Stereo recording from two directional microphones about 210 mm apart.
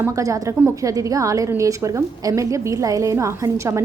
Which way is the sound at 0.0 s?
15° right (ahead or behind).